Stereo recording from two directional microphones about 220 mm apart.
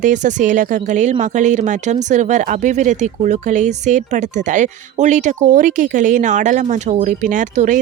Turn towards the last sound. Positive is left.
turn(degrees=-35)  # may be behind; listen again after turning